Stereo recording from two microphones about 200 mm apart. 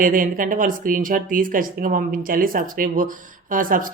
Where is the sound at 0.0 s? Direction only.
45° right (ahead or behind).